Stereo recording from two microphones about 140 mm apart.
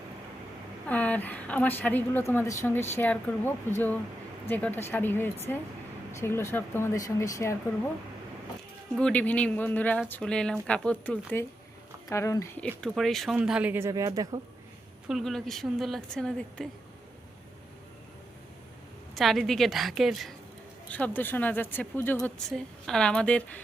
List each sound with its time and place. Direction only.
0.9 s a woman's voice: 10° left (ahead or behind)
9.0 s a woman's voice: 10° left (ahead or behind)
12.0 s speech: 20° left (ahead or behind)
12.5 s a woman's voice: 10° left (ahead or behind); by 14.4 s 25° right (ahead or behind)
15.0 s speech: centre (ahead or behind)
19.1 s speech: centre (ahead or behind)
20.9 s a woman's voice: 10° left (ahead or behind)
22.4 s a woman's voice: 5° left (ahead or behind)